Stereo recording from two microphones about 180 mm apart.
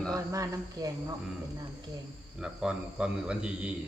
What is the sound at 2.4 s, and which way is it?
A man's voice, 5° right (ahead or behind).